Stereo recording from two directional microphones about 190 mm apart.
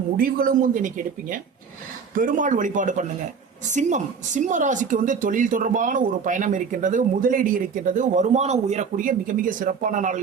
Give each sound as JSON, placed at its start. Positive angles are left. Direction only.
{"t": 0.2, "sound": "speech", "side_deg": -50}